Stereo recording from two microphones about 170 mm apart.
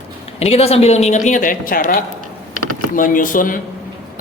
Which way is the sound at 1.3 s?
50° left (ahead or behind).